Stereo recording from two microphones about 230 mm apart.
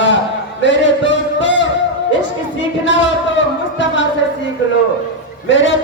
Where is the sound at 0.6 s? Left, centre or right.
Left.